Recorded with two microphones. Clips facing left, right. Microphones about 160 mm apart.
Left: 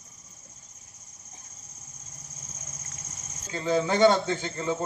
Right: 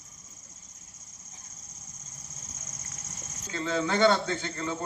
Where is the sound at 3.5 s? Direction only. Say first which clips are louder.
Left 3 dB; 15° left (ahead or behind).